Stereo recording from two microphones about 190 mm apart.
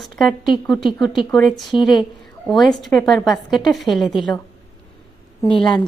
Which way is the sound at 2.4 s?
Centre (ahead or behind).